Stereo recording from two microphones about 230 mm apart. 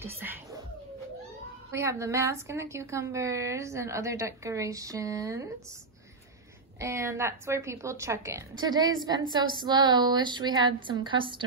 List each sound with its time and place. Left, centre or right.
0.0 s cat: centre
1.7 s a woman's voice: centre
6.8 s a woman's voice: centre